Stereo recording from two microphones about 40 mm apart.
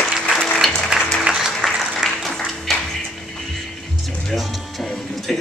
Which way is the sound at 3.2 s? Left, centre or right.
Centre.